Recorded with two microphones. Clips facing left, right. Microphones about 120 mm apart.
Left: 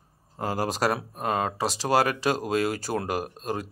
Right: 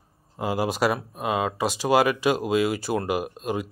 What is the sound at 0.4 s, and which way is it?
Speech, 10° right (ahead or behind).